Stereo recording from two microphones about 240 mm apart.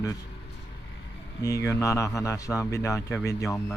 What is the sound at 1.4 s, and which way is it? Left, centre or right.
Speech, centre.